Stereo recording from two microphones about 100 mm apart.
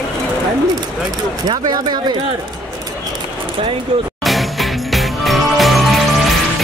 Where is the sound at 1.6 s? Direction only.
45° right (ahead or behind).